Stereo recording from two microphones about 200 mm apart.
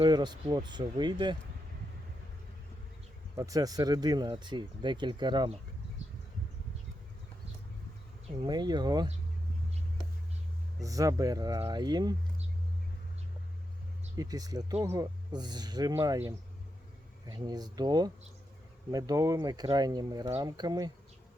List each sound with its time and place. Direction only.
0.0 s speech: 20° right (ahead or behind)
3.3 s speech: 15° right (ahead or behind)
8.4 s speech: 20° right (ahead or behind)
10.8 s speech: 15° right (ahead or behind)
14.2 s speech: 20° right (ahead or behind)